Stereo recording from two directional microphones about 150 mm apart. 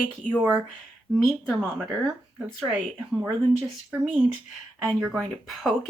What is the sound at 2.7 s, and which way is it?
Speech, 10° right (ahead or behind).